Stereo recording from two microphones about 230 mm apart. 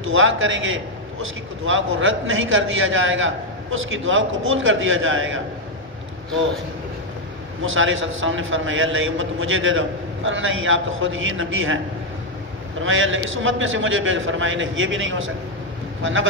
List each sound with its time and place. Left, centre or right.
0.0 s a man's voice: right
7.6 s a man's voice: right
12.8 s a man's voice: right